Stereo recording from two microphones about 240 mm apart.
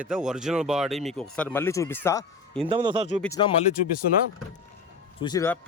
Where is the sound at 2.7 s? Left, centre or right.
Centre.